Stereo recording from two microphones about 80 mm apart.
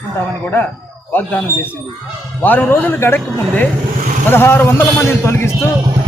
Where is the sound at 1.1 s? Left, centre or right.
Left.